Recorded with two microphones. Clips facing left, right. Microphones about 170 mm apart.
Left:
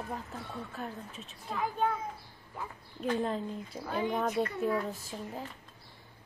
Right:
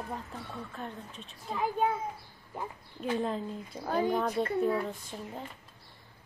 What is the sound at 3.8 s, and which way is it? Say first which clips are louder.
Speech: right 4 dB; 40° right (ahead or behind).